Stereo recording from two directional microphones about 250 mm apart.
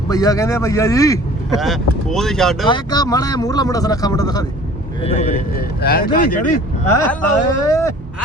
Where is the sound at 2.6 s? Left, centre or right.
Centre.